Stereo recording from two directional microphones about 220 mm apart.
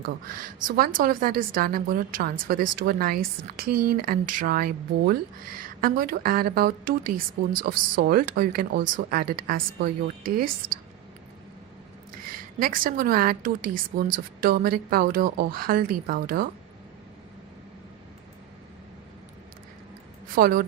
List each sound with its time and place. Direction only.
0.0 s speech: 40° right (ahead or behind)
12.5 s speech: 40° right (ahead or behind)
20.3 s speech: 40° right (ahead or behind)